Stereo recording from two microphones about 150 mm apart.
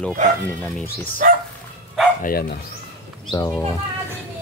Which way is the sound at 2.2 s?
90° left.